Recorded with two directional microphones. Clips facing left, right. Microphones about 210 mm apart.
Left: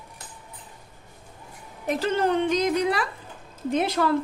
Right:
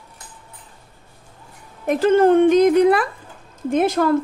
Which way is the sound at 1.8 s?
50° right (ahead or behind).